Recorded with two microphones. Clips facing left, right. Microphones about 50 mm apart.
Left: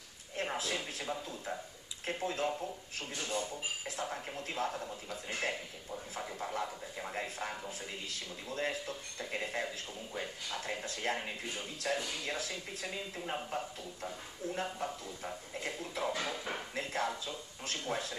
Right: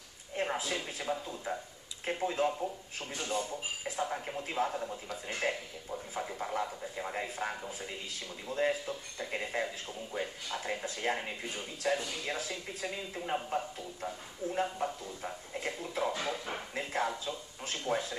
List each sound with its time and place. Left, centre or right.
0.4 s speech: centre